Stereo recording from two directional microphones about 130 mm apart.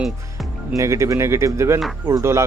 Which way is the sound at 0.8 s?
25° right (ahead or behind).